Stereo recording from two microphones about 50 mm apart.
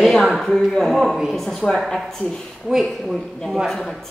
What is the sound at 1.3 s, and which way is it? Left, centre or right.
Speech, centre.